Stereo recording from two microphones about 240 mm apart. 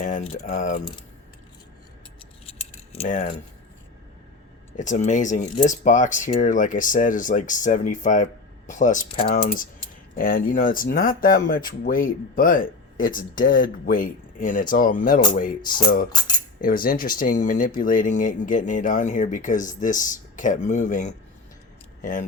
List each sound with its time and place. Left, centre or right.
0.0 s speech: left
2.9 s speech: left
4.8 s speech: left
16.0 s speech: centre
16.6 s speech: left